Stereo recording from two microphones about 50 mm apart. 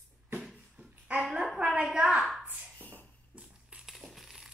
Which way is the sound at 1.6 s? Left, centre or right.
Right.